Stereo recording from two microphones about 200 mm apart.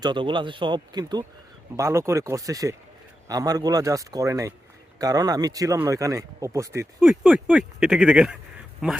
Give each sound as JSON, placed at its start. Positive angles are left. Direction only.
{"t": 0.0, "sound": "speech", "side_deg": -25}
{"t": 7.0, "sound": "speech", "side_deg": -5}